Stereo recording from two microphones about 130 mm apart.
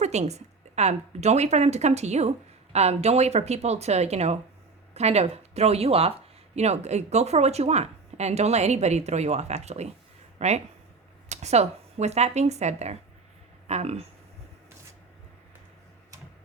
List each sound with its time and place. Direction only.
0.0 s a woman's voice: 60° right (ahead or behind)